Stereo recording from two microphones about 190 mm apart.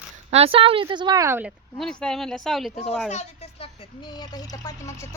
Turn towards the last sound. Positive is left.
turn(degrees=15)  # may be behind; listen again after turning